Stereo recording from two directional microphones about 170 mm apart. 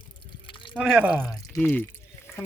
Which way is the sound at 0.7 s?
5° right (ahead or behind).